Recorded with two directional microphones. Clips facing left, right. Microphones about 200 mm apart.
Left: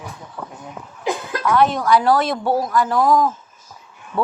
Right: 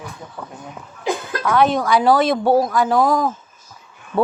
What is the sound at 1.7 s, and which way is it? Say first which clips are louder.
Speech: right 1 dB; 60° right (ahead or behind).